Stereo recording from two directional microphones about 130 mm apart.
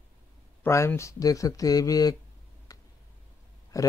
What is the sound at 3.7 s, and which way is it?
Speech, 25° left (ahead or behind).